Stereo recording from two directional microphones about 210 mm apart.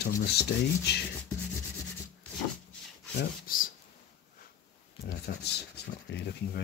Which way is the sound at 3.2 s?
40° left (ahead or behind).